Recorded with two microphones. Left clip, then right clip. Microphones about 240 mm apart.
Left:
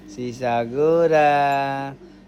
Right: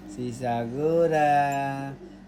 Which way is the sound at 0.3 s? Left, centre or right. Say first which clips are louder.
Left 8 dB; left.